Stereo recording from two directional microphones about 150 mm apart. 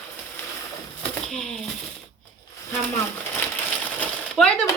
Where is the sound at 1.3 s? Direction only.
5° left (ahead or behind).